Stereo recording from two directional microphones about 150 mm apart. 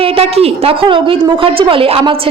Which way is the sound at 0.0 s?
40° right (ahead or behind).